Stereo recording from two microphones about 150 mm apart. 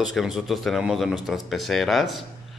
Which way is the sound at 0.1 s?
Centre (ahead or behind).